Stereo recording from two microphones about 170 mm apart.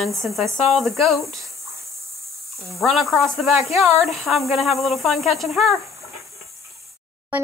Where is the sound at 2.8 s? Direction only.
Centre (ahead or behind).